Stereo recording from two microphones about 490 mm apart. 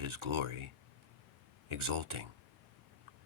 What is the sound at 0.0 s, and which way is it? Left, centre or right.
Speech, right.